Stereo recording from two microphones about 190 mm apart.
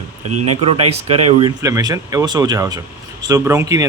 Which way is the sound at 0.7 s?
30° right (ahead or behind).